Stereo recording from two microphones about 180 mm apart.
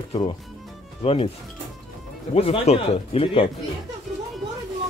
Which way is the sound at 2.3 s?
30° left (ahead or behind).